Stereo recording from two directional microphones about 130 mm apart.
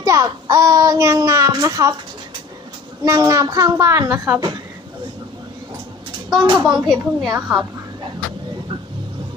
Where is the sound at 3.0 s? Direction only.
30° right (ahead or behind).